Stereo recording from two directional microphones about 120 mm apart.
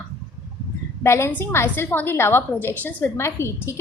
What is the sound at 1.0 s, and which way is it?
A woman's voice, 20° left (ahead or behind).